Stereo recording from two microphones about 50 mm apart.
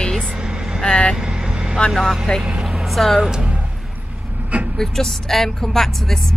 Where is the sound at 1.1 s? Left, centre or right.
Centre.